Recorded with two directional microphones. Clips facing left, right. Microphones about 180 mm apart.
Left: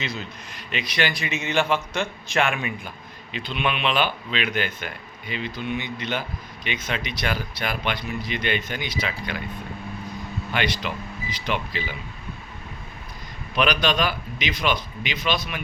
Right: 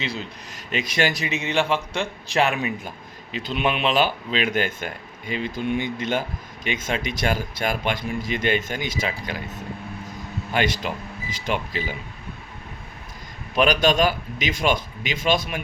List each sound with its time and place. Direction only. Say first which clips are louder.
0.0 s a man's voice: right 2 dB; 30° right (ahead or behind)
0.7 s a man's voice: right 3 dB; 45° right (ahead or behind)
10.5 s speech: right 3 dB; 45° right (ahead or behind)
13.6 s speech: right 4 dB; 45° right (ahead or behind)